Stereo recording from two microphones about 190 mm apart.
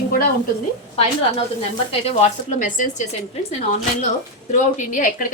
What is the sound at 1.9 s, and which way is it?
A woman's voice, 35° left (ahead or behind).